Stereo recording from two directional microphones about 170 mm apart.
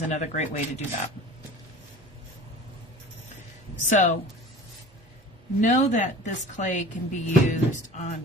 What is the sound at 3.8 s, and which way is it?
Speech, 45° left (ahead or behind).